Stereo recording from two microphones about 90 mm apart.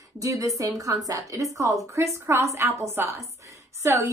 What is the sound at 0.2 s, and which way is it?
A woman's voice, 40° right (ahead or behind).